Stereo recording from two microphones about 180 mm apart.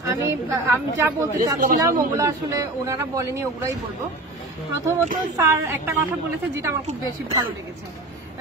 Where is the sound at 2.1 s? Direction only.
15° right (ahead or behind).